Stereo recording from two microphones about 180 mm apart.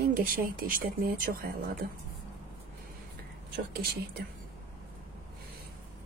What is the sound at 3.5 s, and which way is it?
Speech, 60° right (ahead or behind).